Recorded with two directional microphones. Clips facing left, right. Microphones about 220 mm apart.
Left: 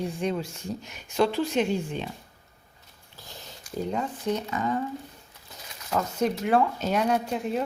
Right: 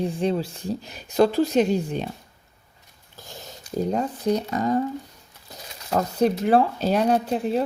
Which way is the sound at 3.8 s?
40° right (ahead or behind).